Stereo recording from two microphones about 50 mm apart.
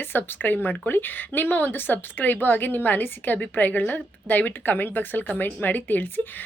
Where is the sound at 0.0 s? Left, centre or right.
Left.